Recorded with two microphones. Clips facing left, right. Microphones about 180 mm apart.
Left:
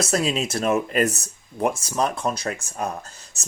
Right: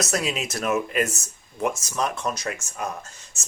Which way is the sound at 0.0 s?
30° left (ahead or behind).